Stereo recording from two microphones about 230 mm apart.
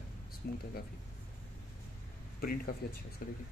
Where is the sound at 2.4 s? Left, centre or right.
Left.